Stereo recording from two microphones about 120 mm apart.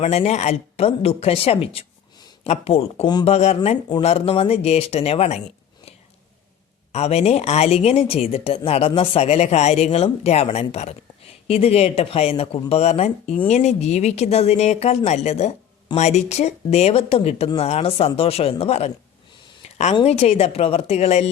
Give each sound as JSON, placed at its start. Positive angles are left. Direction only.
{"t": 0.0, "sound": "speech", "side_deg": 65}
{"t": 6.9, "sound": "speech", "side_deg": 60}
{"t": 19.6, "sound": "a sound", "side_deg": 60}
{"t": 20.1, "sound": "speech", "side_deg": 60}